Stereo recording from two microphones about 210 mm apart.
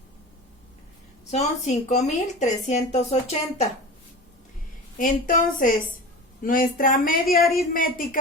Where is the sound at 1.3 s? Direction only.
35° left (ahead or behind).